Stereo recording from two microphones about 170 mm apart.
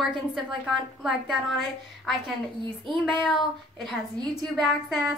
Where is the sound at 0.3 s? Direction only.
5° right (ahead or behind).